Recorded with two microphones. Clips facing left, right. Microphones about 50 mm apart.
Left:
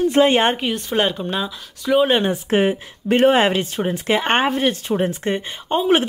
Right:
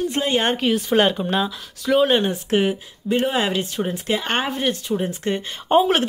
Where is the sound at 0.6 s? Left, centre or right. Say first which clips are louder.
Right 2 dB; centre.